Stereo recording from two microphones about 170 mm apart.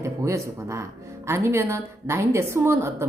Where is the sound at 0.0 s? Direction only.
20° right (ahead or behind).